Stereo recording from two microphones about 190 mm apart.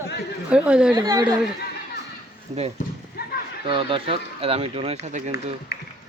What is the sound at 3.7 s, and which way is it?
Speech, 30° right (ahead or behind).